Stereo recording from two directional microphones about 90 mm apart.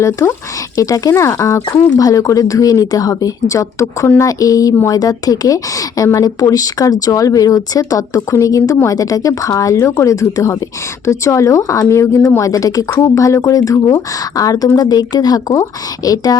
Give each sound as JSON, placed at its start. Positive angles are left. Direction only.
{"t": 0.2, "sound": "speech", "side_deg": 30}